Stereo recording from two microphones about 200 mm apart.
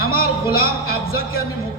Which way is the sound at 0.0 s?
50° left (ahead or behind).